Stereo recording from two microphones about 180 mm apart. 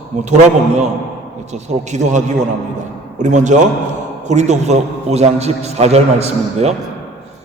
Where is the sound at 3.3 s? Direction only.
45° right (ahead or behind).